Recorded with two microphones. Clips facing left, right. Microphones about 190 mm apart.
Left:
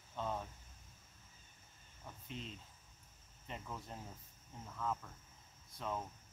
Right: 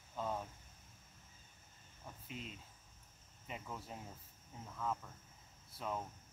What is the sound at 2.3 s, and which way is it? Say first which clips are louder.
Speech: left 1 dB; 5° right (ahead or behind).